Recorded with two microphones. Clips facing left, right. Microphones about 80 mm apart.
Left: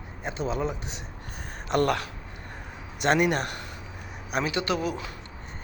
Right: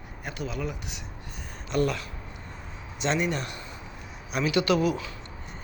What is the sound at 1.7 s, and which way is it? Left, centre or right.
Speech, left.